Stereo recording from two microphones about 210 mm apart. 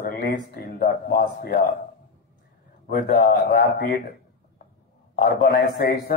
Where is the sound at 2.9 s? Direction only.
45° left (ahead or behind).